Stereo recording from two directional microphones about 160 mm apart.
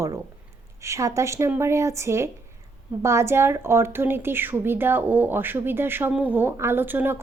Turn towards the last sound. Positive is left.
turn(degrees=-10)  # may be behind; listen again after turning